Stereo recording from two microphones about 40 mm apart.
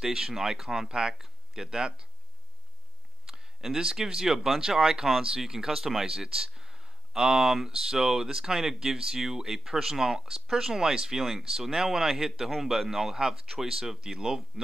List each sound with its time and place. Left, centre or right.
0.0 s speech: centre
3.3 s speech: centre